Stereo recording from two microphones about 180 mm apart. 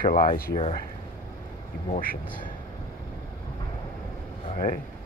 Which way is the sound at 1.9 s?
50° left (ahead or behind).